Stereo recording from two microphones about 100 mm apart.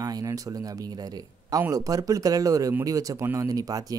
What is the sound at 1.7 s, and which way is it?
Speech, 35° right (ahead or behind).